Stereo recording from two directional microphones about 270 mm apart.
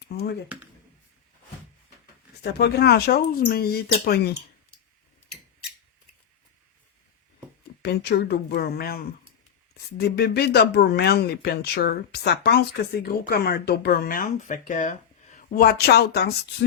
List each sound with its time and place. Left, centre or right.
0.0 s speech: left
0.4 s speech: centre
2.4 s speech: left
7.8 s speech: left